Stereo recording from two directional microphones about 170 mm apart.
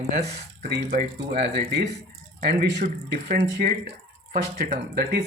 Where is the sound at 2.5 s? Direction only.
80° right.